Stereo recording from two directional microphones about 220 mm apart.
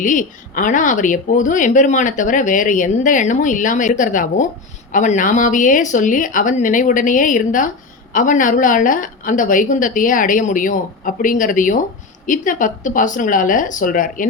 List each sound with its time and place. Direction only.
0.0 s a woman's voice: 35° left (ahead or behind)